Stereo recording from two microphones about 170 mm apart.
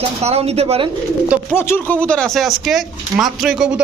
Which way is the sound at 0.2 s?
40° right (ahead or behind).